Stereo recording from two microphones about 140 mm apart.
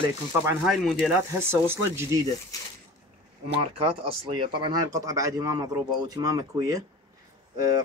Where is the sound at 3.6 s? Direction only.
40° right (ahead or behind).